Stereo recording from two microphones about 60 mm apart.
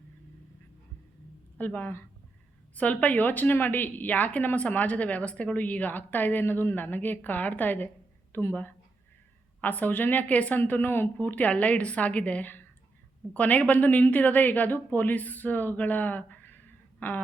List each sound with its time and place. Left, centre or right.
1.5 s a woman's voice: left
9.6 s a woman's voice: left